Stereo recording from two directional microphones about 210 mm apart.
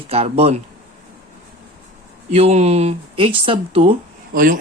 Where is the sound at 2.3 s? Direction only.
30° right (ahead or behind).